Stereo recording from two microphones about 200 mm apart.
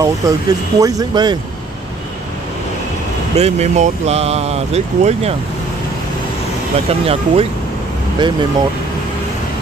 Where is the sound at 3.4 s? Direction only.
30° right (ahead or behind).